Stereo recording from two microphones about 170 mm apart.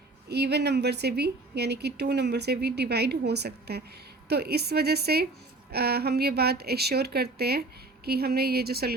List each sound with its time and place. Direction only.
0.3 s a woman's voice: 75° right (ahead or behind)